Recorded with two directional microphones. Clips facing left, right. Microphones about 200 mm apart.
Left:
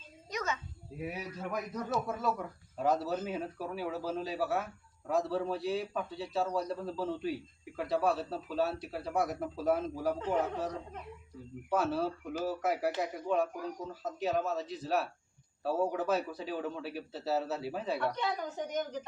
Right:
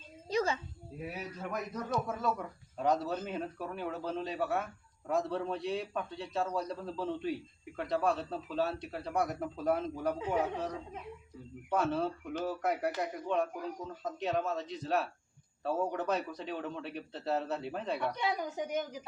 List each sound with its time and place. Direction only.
0.3 s a sound: 30° right (ahead or behind)
1.0 s speech: 5° left (ahead or behind)
18.1 s a woman's voice: 10° right (ahead or behind)